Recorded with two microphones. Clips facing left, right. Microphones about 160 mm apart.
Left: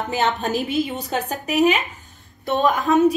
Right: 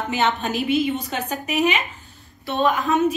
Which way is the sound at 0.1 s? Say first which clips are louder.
Left 1 dB; 40° left (ahead or behind).